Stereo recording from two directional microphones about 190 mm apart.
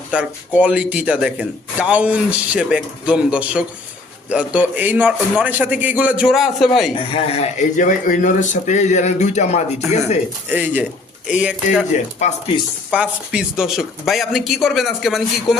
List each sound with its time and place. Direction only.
0.1 s speech: 5° right (ahead or behind)
6.9 s speech: 30° left (ahead or behind)
10.5 s speech: 10° right (ahead or behind)
12.2 s speech: 40° left (ahead or behind)
12.9 s speech: 5° right (ahead or behind)